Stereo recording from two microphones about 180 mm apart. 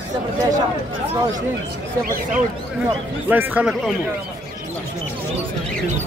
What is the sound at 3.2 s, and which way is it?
Speech, 10° right (ahead or behind).